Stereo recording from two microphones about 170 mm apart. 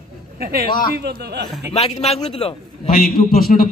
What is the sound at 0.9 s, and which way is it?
Speech, 70° right (ahead or behind).